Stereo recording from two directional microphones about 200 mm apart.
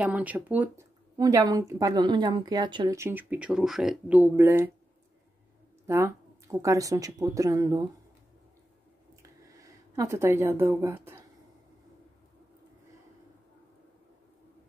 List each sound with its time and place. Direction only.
0.0 s speech: 5° right (ahead or behind)
5.9 s speech: 15° right (ahead or behind)
9.2 s a sound: 15° right (ahead or behind)